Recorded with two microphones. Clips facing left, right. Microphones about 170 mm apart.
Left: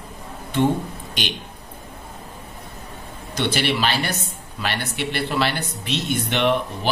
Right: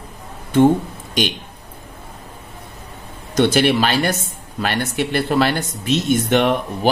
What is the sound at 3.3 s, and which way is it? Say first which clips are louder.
Speech: right 8 dB; 50° right (ahead or behind).